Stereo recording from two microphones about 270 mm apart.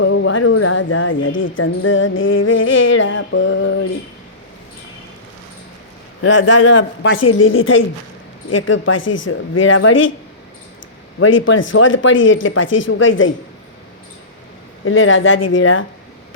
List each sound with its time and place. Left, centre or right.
0.0 s speech: left
6.2 s speech: left
11.2 s speech: left
14.8 s speech: left